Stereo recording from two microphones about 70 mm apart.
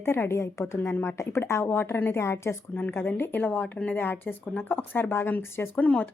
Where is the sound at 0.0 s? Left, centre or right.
Left.